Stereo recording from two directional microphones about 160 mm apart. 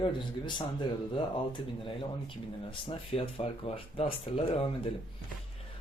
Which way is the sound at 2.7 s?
35° left (ahead or behind).